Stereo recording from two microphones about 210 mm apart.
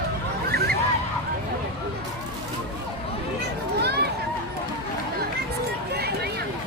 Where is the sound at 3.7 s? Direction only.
50° right (ahead or behind).